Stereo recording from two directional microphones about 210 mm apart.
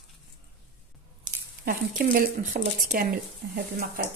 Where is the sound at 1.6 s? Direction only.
40° right (ahead or behind).